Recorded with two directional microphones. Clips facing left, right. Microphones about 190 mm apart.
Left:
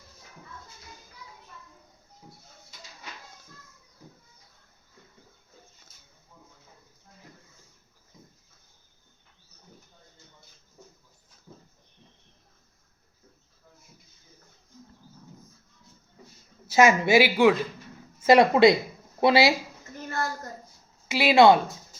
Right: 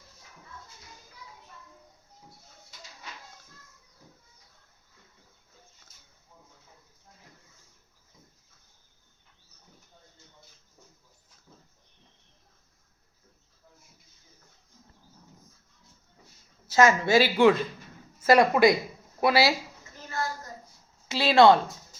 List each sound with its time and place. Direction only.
16.7 s speech: 10° left (ahead or behind)
18.2 s speech: 20° left (ahead or behind)
20.1 s a sound: 55° left (ahead or behind)
21.1 s speech: 10° left (ahead or behind)